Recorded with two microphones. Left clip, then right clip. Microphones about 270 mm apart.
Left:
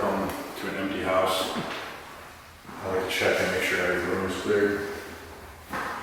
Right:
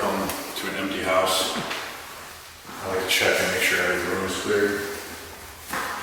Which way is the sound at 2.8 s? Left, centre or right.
Centre.